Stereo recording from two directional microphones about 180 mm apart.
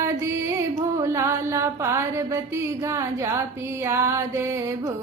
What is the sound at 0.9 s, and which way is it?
Mantra, 15° right (ahead or behind).